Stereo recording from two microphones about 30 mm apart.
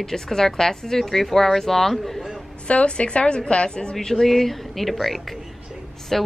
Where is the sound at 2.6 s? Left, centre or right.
Left.